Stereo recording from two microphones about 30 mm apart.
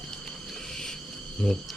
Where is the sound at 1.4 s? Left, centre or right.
Centre.